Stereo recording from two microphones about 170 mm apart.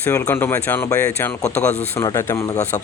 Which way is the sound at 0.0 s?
15° left (ahead or behind).